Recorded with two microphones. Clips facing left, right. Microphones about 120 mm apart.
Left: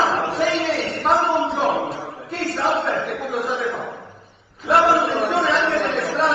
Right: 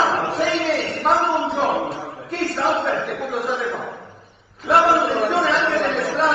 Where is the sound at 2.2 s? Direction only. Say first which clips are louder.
Right 1 dB; centre (ahead or behind).